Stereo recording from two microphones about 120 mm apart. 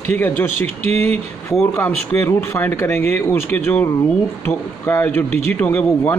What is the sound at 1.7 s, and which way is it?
Speech, 20° left (ahead or behind).